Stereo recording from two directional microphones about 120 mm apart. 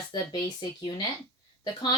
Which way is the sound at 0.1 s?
35° left (ahead or behind).